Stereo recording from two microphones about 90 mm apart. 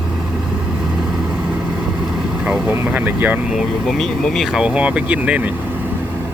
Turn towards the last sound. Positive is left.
turn(degrees=-15)  # may be behind; listen again after turning